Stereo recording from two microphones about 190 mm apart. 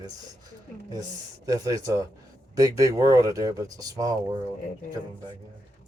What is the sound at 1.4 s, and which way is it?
Speech, 20° right (ahead or behind).